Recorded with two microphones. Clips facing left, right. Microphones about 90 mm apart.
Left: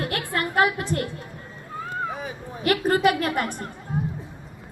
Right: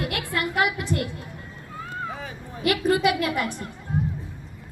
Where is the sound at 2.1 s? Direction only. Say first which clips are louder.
Left 3 dB; 15° left (ahead or behind).